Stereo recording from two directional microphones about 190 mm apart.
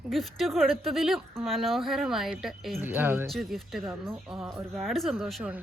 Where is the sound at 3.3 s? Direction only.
Centre (ahead or behind).